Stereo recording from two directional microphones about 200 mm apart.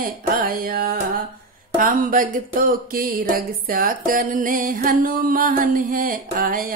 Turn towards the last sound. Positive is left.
turn(degrees=-45)  # may be behind; listen again after turning